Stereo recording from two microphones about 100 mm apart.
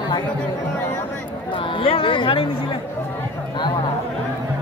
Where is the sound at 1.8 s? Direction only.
60° left (ahead or behind).